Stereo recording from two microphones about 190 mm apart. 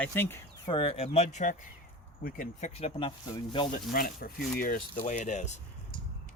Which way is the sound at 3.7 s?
50° left (ahead or behind).